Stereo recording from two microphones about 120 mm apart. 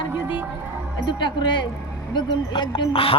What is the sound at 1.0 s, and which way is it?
A man's voice, 40° left (ahead or behind).